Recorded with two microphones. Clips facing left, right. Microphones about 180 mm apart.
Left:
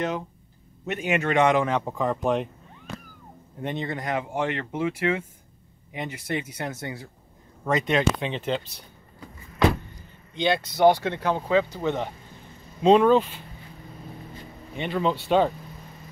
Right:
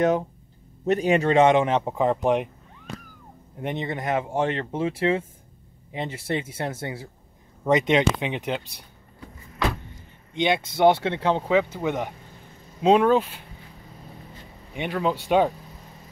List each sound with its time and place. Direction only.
0.8 s a man's voice: 35° right (ahead or behind); by 2.5 s 15° right (ahead or behind)
3.6 s a man's voice: 20° right (ahead or behind)
9.9 s speech: 20° right (ahead or behind)
14.8 s speech: 10° right (ahead or behind)